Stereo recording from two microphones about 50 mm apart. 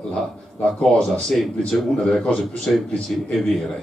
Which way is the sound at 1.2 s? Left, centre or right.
Centre.